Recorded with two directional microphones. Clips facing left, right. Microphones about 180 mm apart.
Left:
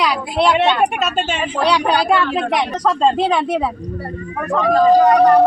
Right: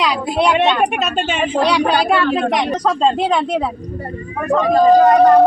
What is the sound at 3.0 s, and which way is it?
Speech, centre (ahead or behind).